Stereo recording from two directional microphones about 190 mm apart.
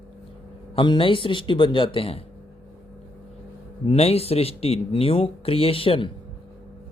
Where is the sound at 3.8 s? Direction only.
30° left (ahead or behind).